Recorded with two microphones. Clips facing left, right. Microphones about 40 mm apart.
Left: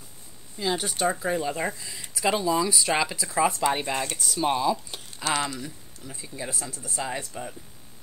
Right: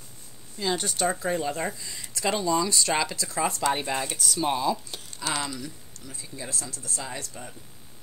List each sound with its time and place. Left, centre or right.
0.6 s speech: centre
5.6 s speech: centre